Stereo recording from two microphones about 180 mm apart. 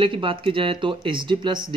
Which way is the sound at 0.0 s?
30° right (ahead or behind).